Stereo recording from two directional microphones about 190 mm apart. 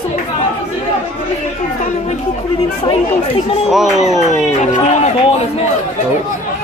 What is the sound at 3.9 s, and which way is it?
A man's voice, 35° left (ahead or behind).